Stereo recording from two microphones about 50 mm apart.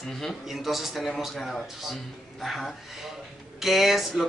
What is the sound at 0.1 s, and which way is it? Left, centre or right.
Speech, centre.